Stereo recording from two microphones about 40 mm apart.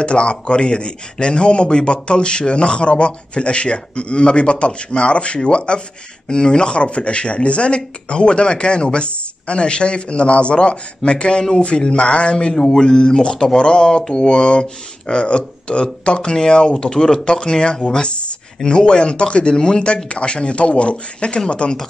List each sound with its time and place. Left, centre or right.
0.0 s a man's voice: left